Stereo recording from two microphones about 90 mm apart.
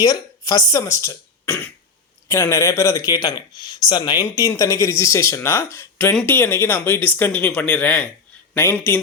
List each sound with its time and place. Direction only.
0.0 s speech: 45° left (ahead or behind); by 1.7 s 25° left (ahead or behind)
2.2 s speech: 35° left (ahead or behind); by 4.2 s 50° left (ahead or behind)
4.4 s speech: 35° left (ahead or behind); by 9.0 s 20° left (ahead or behind)